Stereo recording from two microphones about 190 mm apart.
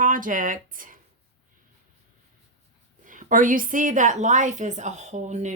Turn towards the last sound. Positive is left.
turn(degrees=-40)  # may be behind; listen again after turning